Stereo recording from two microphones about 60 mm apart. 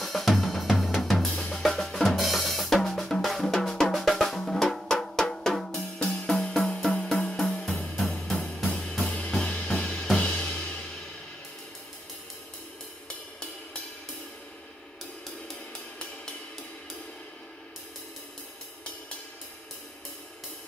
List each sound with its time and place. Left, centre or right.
0.0 s drum kit: centre
1.2 s drum kit: centre
1.5 s drum: centre
5.9 s music: centre
8.6 s drum kit: centre
10.1 s cymbal: centre